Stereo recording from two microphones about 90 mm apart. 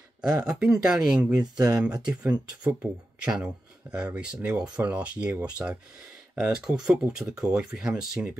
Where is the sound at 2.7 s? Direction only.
20° right (ahead or behind).